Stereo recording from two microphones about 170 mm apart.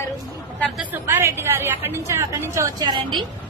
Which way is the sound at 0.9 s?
15° right (ahead or behind).